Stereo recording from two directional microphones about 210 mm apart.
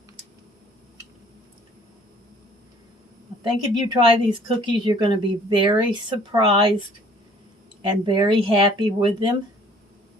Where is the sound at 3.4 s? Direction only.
20° right (ahead or behind).